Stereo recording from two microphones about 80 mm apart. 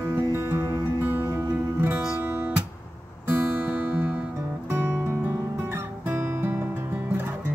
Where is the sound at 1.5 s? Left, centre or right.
Right.